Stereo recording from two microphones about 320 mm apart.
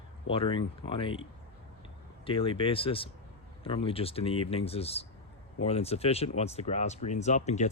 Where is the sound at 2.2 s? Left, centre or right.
Centre.